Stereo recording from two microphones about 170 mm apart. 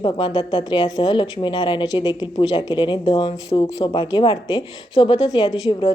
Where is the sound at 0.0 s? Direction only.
30° left (ahead or behind).